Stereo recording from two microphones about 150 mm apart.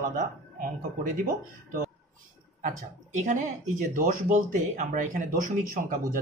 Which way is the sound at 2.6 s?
55° right (ahead or behind).